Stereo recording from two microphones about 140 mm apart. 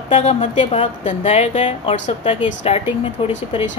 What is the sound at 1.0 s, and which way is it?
Speech, 55° left (ahead or behind).